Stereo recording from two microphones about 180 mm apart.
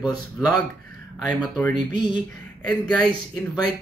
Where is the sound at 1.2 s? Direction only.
5° left (ahead or behind).